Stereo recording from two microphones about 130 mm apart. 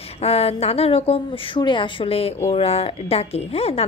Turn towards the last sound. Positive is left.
turn(degrees=50)  # may be behind; listen again after turning